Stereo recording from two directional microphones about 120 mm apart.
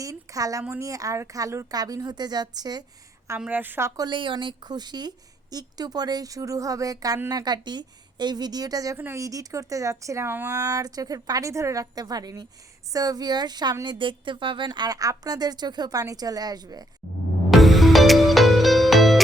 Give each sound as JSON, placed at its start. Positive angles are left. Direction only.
{"t": 0.0, "sound": "a sound", "side_deg": -30}
{"t": 0.7, "sound": "a woman's voice", "side_deg": -25}
{"t": 3.4, "sound": "a woman's voice", "side_deg": -15}
{"t": 17.5, "sound": "music", "side_deg": 0}